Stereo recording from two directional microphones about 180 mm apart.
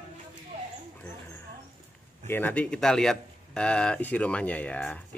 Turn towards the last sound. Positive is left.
turn(degrees=5)  # may be behind; listen again after turning